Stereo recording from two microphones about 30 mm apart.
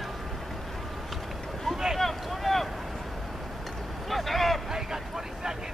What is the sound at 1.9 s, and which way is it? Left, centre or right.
Boat, centre.